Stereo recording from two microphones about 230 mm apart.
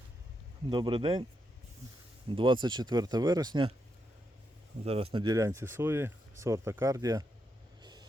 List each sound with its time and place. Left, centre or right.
0.7 s speech: right
2.3 s speech: right
4.8 s speech: right
7.8 s vehicle: centre